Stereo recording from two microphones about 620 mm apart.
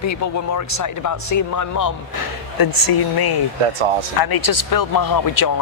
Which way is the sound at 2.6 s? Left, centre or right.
Left.